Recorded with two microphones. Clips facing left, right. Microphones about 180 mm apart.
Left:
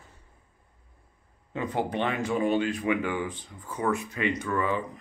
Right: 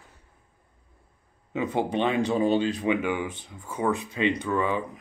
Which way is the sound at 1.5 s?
20° right (ahead or behind).